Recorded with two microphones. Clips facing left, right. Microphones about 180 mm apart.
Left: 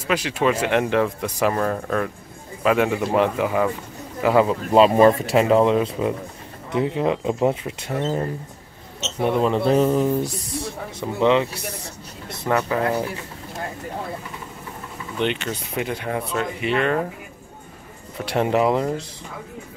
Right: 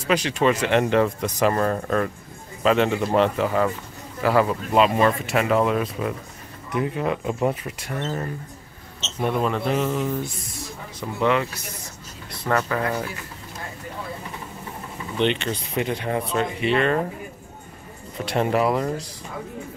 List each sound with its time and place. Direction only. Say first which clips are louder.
0.0 s speech: right 1 dB; 5° left (ahead or behind)
4.2 s speech: left 2 dB; 20° left (ahead or behind)
4.7 s speech: left 5 dB; 30° left (ahead or behind)
9.2 s speech: left 3 dB; 20° left (ahead or behind)
9.7 s speech: left 6 dB; 35° left (ahead or behind)
12.4 s speech: left 1 dB; 10° left (ahead or behind)
15.1 s speech: right 1 dB; 5° left (ahead or behind)
18.2 s speech: left 2 dB; 15° left (ahead or behind)